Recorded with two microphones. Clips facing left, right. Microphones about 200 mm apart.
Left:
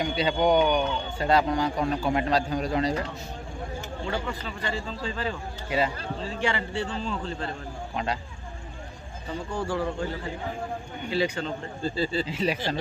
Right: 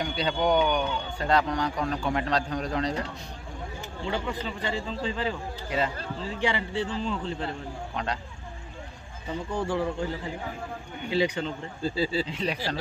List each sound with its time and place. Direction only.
0.0 s a man's voice: 5° left (ahead or behind)
4.0 s a man's voice: 20° right (ahead or behind)
6.4 s a man's voice: 15° right (ahead or behind)
7.9 s speech: 5° left (ahead or behind)
9.5 s a man's voice: 20° right (ahead or behind)
11.8 s a man's voice: 5° right (ahead or behind)
12.3 s a man's voice: 5° left (ahead or behind)